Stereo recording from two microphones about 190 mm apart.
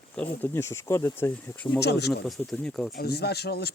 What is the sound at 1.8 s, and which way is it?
Speech, 60° left (ahead or behind).